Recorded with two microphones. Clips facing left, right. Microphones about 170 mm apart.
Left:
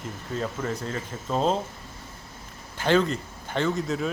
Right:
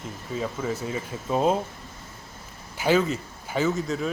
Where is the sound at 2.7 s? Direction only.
10° right (ahead or behind).